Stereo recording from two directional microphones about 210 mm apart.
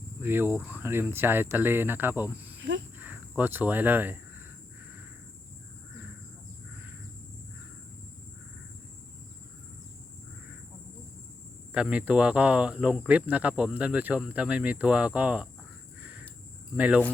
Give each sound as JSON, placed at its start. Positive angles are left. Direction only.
{"t": 0.2, "sound": "speech", "side_deg": -10}
{"t": 2.6, "sound": "speech", "side_deg": -60}
{"t": 3.0, "sound": "a sound", "side_deg": -10}
{"t": 11.7, "sound": "speech", "side_deg": -5}
{"t": 16.7, "sound": "speech", "side_deg": -5}